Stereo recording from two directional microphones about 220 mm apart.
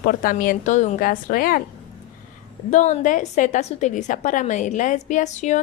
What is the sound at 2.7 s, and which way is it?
A woman's voice, 30° left (ahead or behind).